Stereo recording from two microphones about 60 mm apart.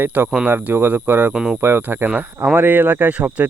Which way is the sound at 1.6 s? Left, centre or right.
Right.